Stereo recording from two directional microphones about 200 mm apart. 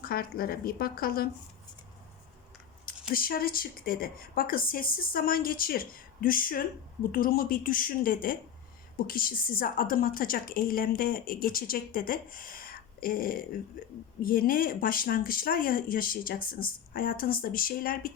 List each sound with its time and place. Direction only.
0.0 s a woman's voice: 50° left (ahead or behind)
3.1 s a woman's voice: 45° left (ahead or behind)